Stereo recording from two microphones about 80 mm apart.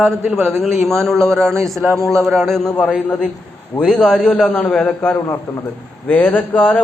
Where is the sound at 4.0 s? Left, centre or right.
Centre.